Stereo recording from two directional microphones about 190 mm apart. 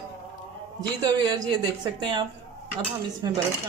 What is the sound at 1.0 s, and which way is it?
Speech, 20° right (ahead or behind).